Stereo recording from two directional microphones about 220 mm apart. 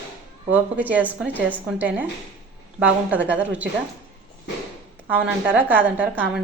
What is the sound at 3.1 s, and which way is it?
Speech, 5° right (ahead or behind).